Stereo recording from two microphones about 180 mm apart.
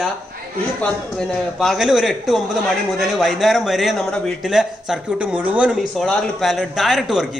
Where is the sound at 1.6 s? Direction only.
Centre (ahead or behind).